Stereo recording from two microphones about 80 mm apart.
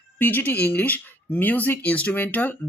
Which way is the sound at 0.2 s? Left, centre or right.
Left.